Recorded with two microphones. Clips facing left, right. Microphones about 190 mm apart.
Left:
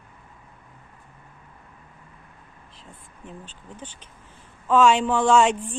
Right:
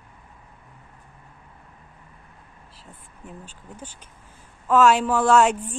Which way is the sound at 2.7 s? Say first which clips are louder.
Left 1 dB; 5° right (ahead or behind).